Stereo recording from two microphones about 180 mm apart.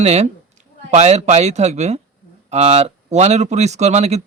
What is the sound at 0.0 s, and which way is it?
A man's voice, 35° right (ahead or behind).